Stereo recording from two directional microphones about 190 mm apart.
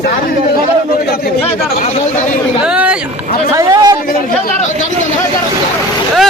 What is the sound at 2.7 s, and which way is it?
Speech, 5° right (ahead or behind).